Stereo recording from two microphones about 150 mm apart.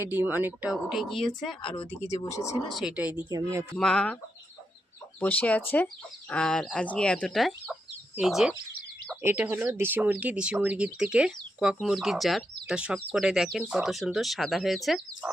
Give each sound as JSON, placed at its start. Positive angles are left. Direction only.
{"t": 0.0, "sound": "speech", "side_deg": -15}
{"t": 1.6, "sound": "speech", "side_deg": 35}
{"t": 2.3, "sound": "speech", "side_deg": 20}
{"t": 2.6, "sound": "speech", "side_deg": 0}
{"t": 3.2, "sound": "speech", "side_deg": -25}
{"t": 3.8, "sound": "speech", "side_deg": 5}
{"t": 5.2, "sound": "speech", "side_deg": 10}
{"t": 9.2, "sound": "speech", "side_deg": -10}